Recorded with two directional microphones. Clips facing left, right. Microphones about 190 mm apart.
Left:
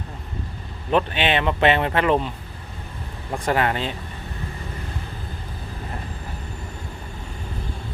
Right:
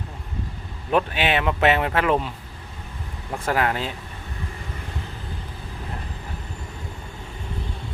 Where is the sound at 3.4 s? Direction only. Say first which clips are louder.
Left 1 dB; centre (ahead or behind).